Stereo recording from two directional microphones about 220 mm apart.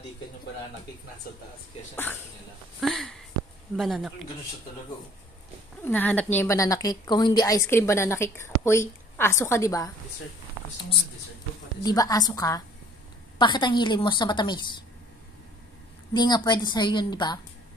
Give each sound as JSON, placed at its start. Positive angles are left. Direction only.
{"t": 2.8, "sound": "speech", "side_deg": 0}
{"t": 5.8, "sound": "a woman's voice", "side_deg": 10}
{"t": 11.8, "sound": "a woman's voice", "side_deg": 15}
{"t": 16.1, "sound": "a woman's voice", "side_deg": 20}